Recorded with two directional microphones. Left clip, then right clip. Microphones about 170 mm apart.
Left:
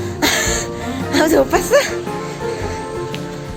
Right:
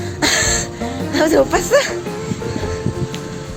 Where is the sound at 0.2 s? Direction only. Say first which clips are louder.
Right 1 dB; 5° left (ahead or behind).